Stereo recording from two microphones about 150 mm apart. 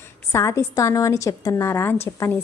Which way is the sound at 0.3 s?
20° left (ahead or behind).